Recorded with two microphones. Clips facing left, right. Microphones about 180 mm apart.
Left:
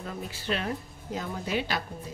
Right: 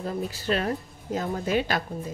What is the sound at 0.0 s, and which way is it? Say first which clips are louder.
A woman's voice: right 7 dB; 40° right (ahead or behind).